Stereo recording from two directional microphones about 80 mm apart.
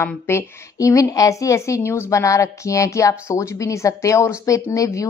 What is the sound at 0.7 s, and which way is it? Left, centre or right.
A woman's voice, left.